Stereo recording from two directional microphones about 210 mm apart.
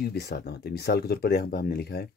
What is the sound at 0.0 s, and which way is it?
Speech, 50° left (ahead or behind).